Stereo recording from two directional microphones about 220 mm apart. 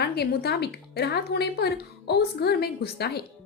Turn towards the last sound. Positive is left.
turn(degrees=45)  # may be behind; listen again after turning